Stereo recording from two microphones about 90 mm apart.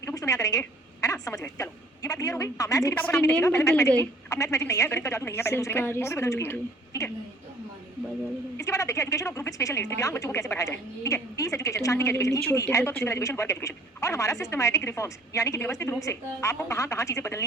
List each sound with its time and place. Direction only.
0.0 s a sound: 35° left (ahead or behind)
1.0 s a woman's voice: 40° left (ahead or behind)
3.0 s a woman's voice: 30° left (ahead or behind)
8.5 s a woman's voice: 35° left (ahead or behind)